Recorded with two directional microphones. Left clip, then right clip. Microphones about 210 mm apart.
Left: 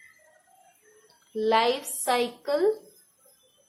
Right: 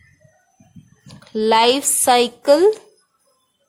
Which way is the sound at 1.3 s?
55° right (ahead or behind).